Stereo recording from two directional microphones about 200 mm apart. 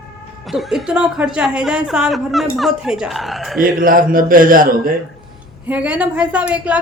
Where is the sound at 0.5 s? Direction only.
Centre (ahead or behind).